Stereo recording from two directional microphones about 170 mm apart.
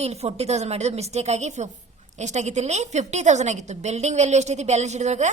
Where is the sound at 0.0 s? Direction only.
40° right (ahead or behind).